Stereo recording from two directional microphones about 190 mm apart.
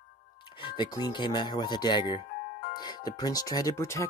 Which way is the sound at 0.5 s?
25° left (ahead or behind).